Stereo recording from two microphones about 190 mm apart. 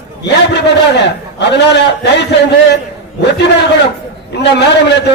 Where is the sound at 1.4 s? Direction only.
65° left (ahead or behind).